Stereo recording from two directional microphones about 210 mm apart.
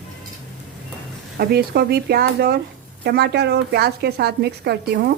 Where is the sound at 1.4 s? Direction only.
50° right (ahead or behind).